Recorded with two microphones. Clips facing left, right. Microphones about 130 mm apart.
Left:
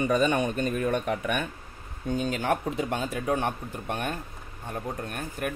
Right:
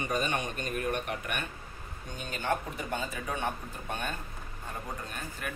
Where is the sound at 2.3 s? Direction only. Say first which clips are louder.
Left 5 dB; 90° left.